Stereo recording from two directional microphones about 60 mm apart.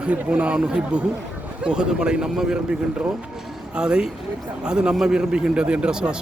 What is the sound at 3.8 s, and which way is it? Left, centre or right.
A man's voice, centre.